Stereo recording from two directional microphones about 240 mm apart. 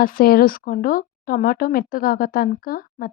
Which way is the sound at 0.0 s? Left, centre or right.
Left.